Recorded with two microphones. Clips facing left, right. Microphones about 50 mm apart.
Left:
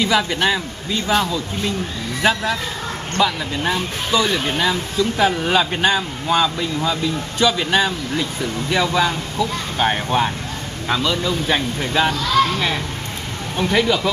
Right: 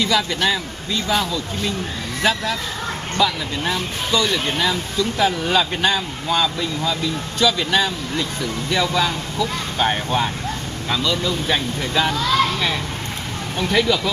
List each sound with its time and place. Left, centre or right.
0.0 s speech: centre